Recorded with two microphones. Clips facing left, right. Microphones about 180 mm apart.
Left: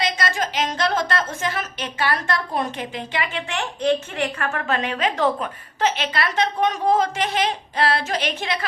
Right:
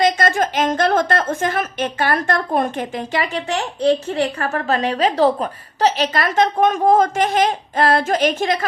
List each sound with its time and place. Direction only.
0.0 s a woman's voice: 50° right (ahead or behind)